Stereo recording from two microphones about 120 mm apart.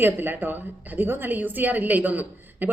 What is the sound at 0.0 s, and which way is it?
A woman's voice, 15° right (ahead or behind).